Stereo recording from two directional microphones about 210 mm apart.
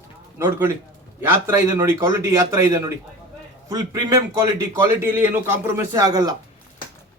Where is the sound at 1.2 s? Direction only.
10° right (ahead or behind).